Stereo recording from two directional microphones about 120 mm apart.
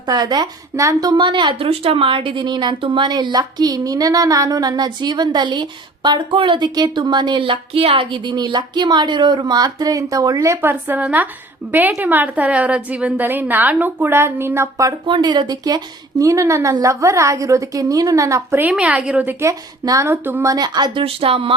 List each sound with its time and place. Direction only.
0.1 s a woman's voice: 35° right (ahead or behind)
1.1 s a woman's voice: 40° right (ahead or behind); by 14.9 s 25° right (ahead or behind)
15.0 s a woman's voice: 40° right (ahead or behind)
18.6 s a woman's voice: 10° right (ahead or behind)
20.5 s speech: 35° right (ahead or behind)